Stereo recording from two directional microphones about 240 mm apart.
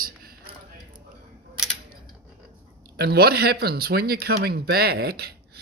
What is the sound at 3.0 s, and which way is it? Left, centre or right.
Speech, right.